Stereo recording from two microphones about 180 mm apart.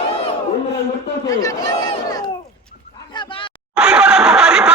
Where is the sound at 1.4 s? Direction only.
20° left (ahead or behind).